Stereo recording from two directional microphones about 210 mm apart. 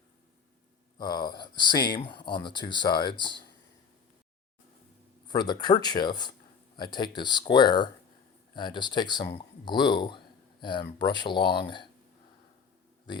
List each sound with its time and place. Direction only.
0.9 s speech: 20° left (ahead or behind)
5.3 s speech: 20° left (ahead or behind)
11.4 s speech: 50° left (ahead or behind)